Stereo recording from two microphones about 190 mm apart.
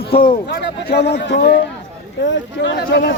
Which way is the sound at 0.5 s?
60° left (ahead or behind).